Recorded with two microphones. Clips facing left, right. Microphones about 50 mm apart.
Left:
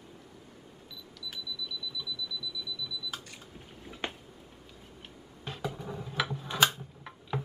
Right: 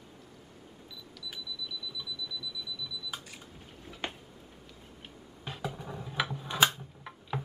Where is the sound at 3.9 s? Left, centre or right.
Centre.